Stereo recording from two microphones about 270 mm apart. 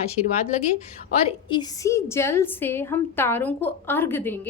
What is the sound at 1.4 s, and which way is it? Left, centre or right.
A woman's voice, centre.